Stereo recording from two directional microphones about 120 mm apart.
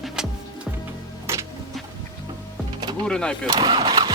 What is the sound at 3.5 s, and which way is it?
Speech, 40° right (ahead or behind).